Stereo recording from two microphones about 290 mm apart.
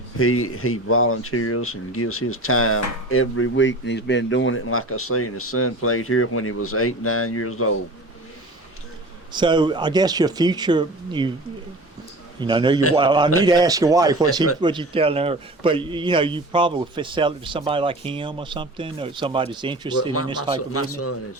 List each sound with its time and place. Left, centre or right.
0.2 s speech: left
9.3 s speech: centre
12.4 s speech: centre
20.7 s speech: left